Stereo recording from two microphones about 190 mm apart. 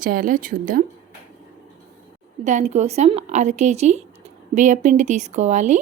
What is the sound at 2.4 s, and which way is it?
A woman's voice, 40° right (ahead or behind).